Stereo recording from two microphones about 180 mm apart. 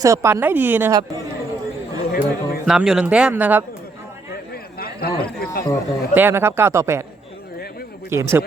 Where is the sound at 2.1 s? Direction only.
55° left (ahead or behind).